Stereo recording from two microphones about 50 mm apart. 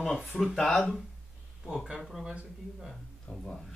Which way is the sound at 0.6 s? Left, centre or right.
Centre.